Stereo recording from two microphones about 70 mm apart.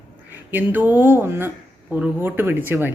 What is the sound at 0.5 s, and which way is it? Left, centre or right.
Speech, right.